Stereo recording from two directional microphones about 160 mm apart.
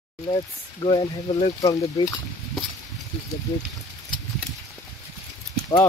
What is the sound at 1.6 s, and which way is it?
Speech, 20° left (ahead or behind).